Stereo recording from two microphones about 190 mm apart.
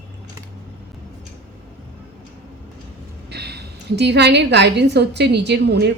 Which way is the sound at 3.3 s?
60° right (ahead or behind).